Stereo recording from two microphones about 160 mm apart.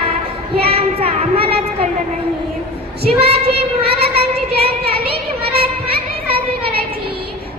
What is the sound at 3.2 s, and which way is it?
Child singing, 35° right (ahead or behind).